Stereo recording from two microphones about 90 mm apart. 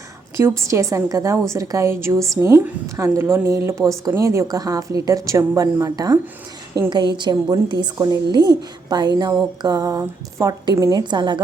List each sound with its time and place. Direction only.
0.3 s a woman's voice: 35° right (ahead or behind)
6.9 s a woman's voice: 55° right (ahead or behind)
7.9 s a woman's voice: 40° right (ahead or behind)
8.3 s a woman's voice: 50° right (ahead or behind)
11.1 s a woman's voice: 60° right (ahead or behind)